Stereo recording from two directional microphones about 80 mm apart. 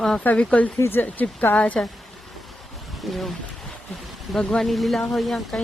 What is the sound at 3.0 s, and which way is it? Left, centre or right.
Speech, centre.